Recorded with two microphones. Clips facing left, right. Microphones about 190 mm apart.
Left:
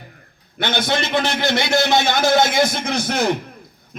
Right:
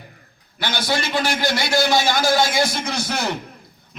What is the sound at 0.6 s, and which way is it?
A man's voice, 20° left (ahead or behind).